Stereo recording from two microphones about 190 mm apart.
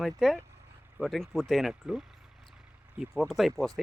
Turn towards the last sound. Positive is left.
turn(degrees=0)  # may be behind; listen again after turning